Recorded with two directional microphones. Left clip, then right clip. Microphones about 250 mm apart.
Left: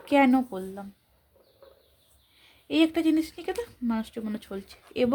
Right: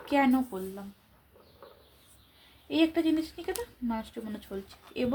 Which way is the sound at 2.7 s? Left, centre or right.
Left.